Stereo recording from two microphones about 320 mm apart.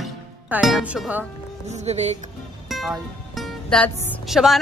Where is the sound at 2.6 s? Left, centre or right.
Centre.